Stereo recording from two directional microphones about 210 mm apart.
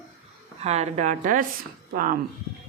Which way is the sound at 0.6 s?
30° right (ahead or behind).